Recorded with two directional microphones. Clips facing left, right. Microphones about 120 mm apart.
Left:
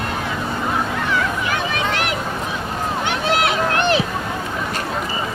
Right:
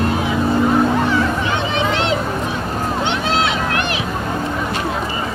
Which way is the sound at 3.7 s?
30° left (ahead or behind).